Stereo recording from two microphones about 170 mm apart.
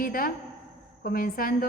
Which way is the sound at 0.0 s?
55° left (ahead or behind).